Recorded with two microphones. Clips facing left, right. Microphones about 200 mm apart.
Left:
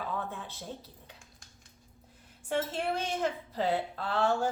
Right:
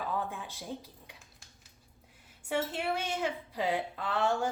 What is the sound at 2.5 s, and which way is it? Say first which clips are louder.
A woman's voice: left 1 dB; 10° right (ahead or behind).